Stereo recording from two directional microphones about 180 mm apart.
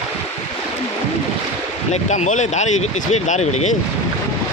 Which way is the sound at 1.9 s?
40° left (ahead or behind).